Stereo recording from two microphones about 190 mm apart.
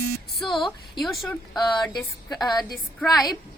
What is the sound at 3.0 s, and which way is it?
Speech, centre (ahead or behind).